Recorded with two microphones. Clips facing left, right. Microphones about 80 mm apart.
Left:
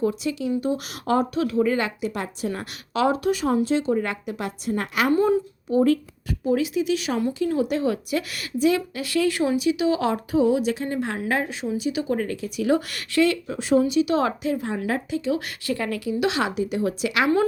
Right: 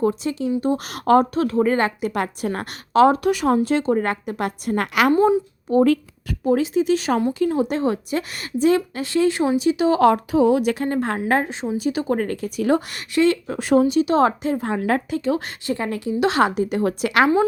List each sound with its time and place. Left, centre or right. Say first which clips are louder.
0.0 s a woman's voice: right 3 dB; right
2.9 s speech: right 7 dB; right
3.2 s a woman's voice: right 3 dB; right
6.4 s a woman's voice: right 4 dB; right
10.0 s a woman's voice: right 6 dB; right
11.8 s a woman's voice: right 4 dB; right
12.9 s speech: right 3 dB; right
13.5 s a woman's voice: right 3 dB; right
14.8 s a woman's voice: right 4 dB; right
15.4 s a woman's voice: right 2 dB; right
16.3 s a woman's voice: right 5 dB; right